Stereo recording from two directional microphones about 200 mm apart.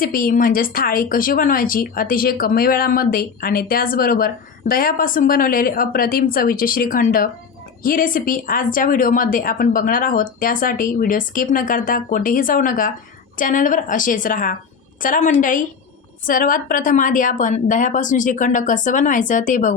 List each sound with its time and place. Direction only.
0.0 s a woman's voice: 45° left (ahead or behind)